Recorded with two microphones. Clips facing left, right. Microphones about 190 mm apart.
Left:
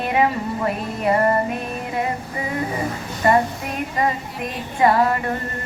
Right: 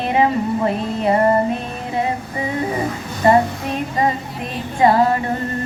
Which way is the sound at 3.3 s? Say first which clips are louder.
Right 3 dB; 30° right (ahead or behind).